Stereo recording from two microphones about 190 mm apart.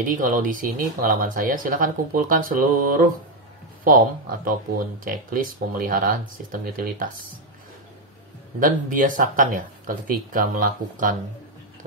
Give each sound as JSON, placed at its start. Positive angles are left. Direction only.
{"t": 0.0, "sound": "speech", "side_deg": -45}
{"t": 8.5, "sound": "speech", "side_deg": -45}